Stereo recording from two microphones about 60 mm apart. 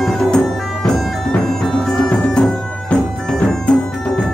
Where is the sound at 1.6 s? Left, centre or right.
Centre.